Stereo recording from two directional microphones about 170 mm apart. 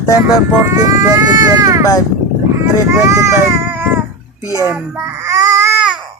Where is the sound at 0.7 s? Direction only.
20° right (ahead or behind).